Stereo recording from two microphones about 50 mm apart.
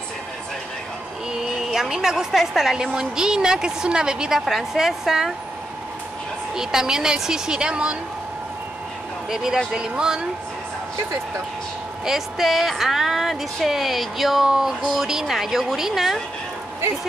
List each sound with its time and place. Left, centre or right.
1.3 s a woman's voice: centre
6.5 s a woman's voice: centre
9.3 s a woman's voice: centre
12.0 s a woman's voice: centre